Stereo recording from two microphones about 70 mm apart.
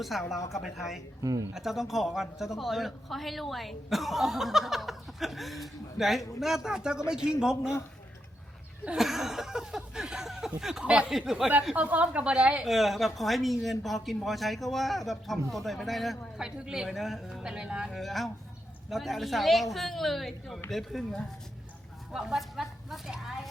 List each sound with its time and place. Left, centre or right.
0.0 s a man's voice: centre
1.2 s speech: right
1.5 s a man's voice: centre
9.0 s a sound: centre
10.6 s a man's voice: centre
11.7 s speech: right
12.6 s a man's voice: centre
16.4 s speech: centre
16.9 s a man's voice: centre
17.4 s speech: centre
17.9 s a man's voice: centre
22.1 s speech: centre